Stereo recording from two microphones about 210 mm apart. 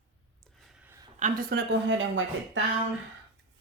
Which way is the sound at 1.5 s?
55° right (ahead or behind).